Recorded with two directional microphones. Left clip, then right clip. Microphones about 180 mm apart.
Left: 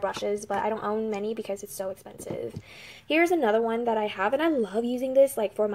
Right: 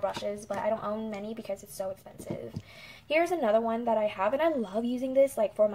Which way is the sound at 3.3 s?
40° left (ahead or behind).